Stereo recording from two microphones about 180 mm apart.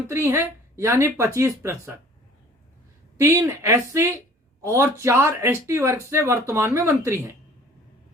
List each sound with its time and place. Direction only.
0.1 s speech: 15° right (ahead or behind)
3.2 s speech: 15° right (ahead or behind)